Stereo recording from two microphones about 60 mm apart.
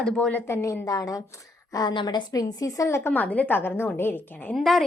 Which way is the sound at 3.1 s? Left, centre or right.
Left.